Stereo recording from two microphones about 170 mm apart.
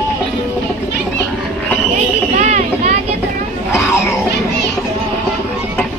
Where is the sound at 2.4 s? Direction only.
45° right (ahead or behind).